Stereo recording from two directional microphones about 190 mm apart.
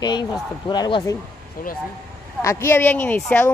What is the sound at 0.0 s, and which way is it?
Speech, 20° left (ahead or behind).